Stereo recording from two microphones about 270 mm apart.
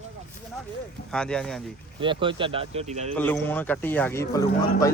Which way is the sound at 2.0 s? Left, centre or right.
Centre.